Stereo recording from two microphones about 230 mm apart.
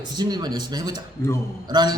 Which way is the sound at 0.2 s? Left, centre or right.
Centre.